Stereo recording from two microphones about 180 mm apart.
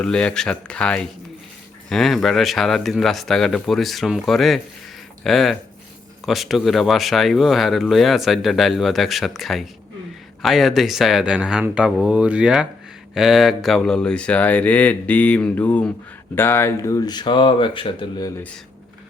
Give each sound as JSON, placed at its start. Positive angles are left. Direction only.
{"t": 0.0, "sound": "speech", "side_deg": 5}